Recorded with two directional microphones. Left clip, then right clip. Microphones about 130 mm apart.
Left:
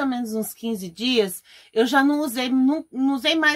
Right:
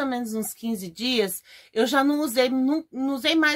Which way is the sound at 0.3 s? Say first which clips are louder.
Left 3 dB; 35° right (ahead or behind).